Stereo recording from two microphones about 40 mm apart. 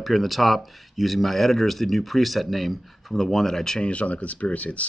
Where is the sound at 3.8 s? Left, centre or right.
Left.